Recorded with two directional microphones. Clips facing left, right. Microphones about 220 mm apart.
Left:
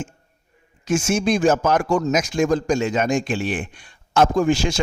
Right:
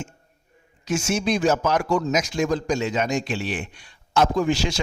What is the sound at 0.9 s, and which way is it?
A man's voice, 50° left (ahead or behind).